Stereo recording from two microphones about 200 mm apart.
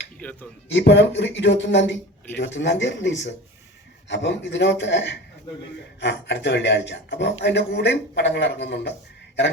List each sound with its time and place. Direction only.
0.2 s speech: 10° left (ahead or behind)
0.7 s a man's voice: 60° left (ahead or behind)